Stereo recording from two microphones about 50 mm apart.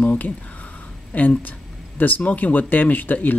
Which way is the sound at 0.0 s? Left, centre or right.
Left.